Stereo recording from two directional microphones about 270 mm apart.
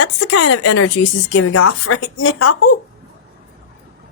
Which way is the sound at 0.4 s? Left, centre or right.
Left.